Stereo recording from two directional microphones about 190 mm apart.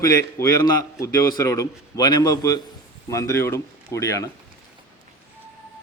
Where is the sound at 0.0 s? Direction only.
15° left (ahead or behind).